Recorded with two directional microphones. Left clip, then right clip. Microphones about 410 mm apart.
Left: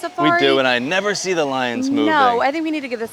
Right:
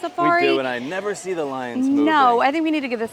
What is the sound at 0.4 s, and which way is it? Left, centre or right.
Speech, left.